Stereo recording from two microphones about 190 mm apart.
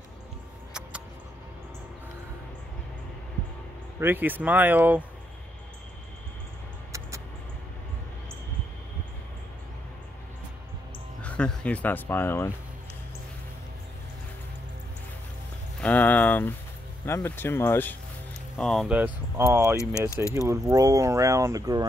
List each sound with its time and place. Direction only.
4.0 s speech: 10° right (ahead or behind)
11.2 s speech: 5° left (ahead or behind)
15.8 s speech: 10° left (ahead or behind)
18.6 s speech: centre (ahead or behind)
19.8 s speech: 15° left (ahead or behind)
20.3 s speech: 15° right (ahead or behind)